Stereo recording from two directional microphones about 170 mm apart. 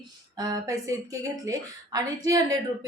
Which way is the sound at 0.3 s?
20° right (ahead or behind).